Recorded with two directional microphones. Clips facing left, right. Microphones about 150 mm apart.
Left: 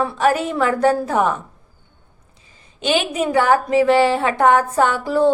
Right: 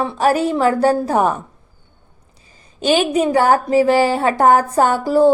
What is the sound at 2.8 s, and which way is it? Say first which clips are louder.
A woman's voice: right 4 dB; 40° right (ahead or behind).